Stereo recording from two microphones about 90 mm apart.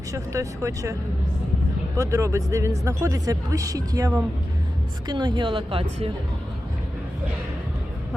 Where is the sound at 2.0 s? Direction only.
35° right (ahead or behind).